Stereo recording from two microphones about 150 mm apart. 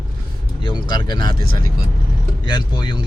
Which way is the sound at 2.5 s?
30° left (ahead or behind).